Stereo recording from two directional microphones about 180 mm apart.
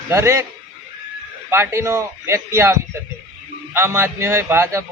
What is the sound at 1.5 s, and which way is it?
A man's voice, 15° right (ahead or behind).